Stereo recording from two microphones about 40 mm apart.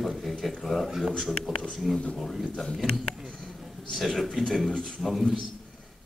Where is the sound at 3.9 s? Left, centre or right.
Centre.